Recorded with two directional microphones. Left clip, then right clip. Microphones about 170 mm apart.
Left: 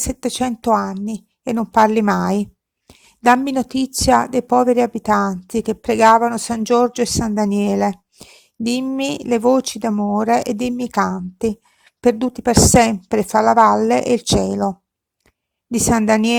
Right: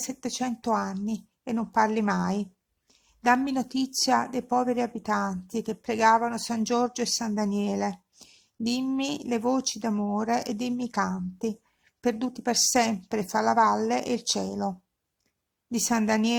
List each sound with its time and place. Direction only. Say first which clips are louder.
0.0 s a woman's voice: left 10 dB; 45° left (ahead or behind)
10.2 s a woman's voice: left 12 dB; 40° left (ahead or behind)